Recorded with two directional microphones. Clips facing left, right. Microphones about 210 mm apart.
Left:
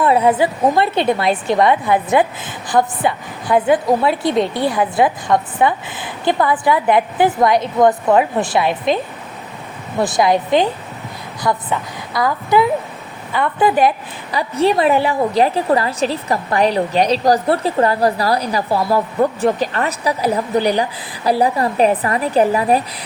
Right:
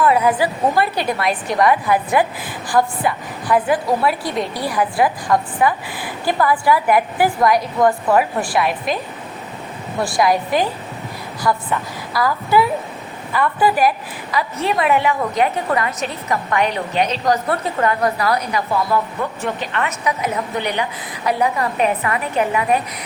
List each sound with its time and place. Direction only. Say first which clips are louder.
0.0 s a woman's voice: left 2 dB; 25° left (ahead or behind)
10.0 s a woman's voice: left 2 dB; 20° left (ahead or behind)